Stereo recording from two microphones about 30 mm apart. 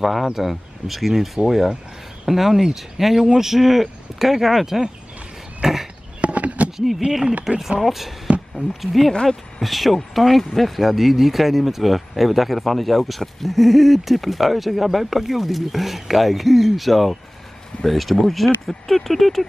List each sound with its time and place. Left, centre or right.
0.0 s speech: centre
5.6 s chop: right
6.2 s chop: right
7.1 s speech: centre
9.1 s speech: left
9.6 s speech: centre